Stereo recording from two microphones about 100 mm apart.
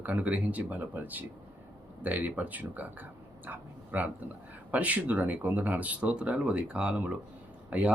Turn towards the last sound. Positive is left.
turn(degrees=-15)  # may be behind; listen again after turning